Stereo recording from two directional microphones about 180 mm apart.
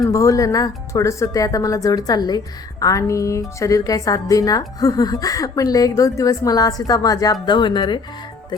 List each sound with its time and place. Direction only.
0.1 s speech: 20° left (ahead or behind)
2.8 s music: 20° left (ahead or behind)
3.6 s speech: 20° left (ahead or behind)